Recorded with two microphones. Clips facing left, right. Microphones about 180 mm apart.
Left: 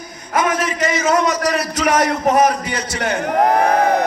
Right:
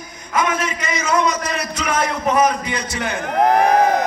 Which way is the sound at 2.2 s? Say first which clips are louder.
Left 2 dB; 45° left (ahead or behind).